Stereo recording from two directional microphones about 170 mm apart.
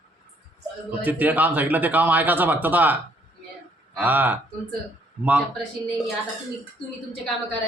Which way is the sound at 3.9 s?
10° right (ahead or behind).